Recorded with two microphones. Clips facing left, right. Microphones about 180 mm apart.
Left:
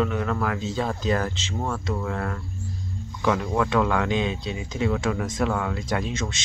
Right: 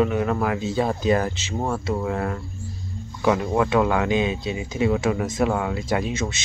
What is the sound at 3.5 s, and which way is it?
Speech, 10° right (ahead or behind).